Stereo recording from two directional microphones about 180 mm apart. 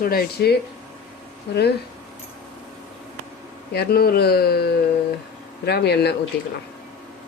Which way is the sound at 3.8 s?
60° left (ahead or behind).